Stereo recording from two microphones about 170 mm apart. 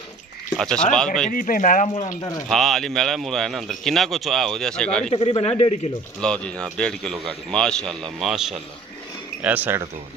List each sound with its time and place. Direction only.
0.6 s a man's voice: 5° left (ahead or behind)
1.3 s speech: 55° left (ahead or behind)
2.5 s a man's voice: centre (ahead or behind)
5.1 s speech: 35° left (ahead or behind)
6.1 s a man's voice: 5° left (ahead or behind); by 9.8 s 10° right (ahead or behind)